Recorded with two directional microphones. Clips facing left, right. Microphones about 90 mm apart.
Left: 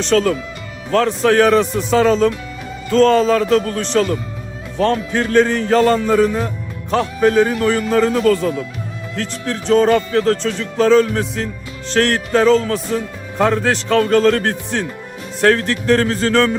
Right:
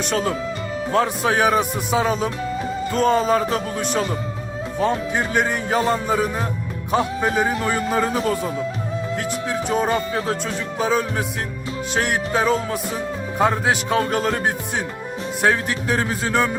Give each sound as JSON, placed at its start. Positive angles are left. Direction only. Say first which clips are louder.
{"t": 0.0, "sound": "speech", "louder": "left 6 dB", "side_deg": -15}